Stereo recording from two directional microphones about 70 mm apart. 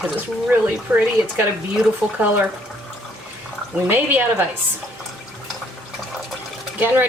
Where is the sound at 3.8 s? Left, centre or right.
Right.